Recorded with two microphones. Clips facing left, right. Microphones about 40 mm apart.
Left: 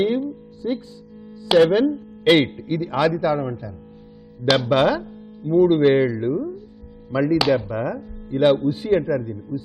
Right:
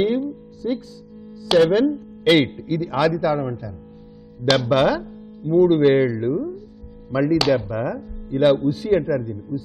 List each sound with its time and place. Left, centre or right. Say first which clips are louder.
0.0 s music: even; centre
0.6 s a man's voice: right 1 dB; centre
8.6 s a man's voice: right 1 dB; left
8.9 s speech: even; centre
9.5 s speech: right 1 dB; centre